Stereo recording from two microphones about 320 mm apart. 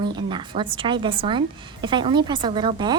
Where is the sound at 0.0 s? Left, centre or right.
Centre.